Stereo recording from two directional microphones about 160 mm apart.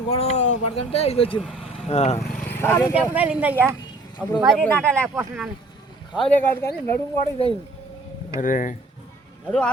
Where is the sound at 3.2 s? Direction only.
10° right (ahead or behind).